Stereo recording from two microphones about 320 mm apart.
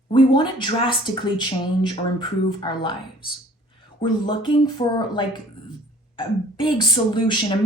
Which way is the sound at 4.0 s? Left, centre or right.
Centre.